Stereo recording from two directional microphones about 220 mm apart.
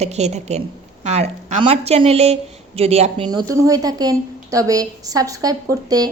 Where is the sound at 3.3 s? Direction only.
15° right (ahead or behind).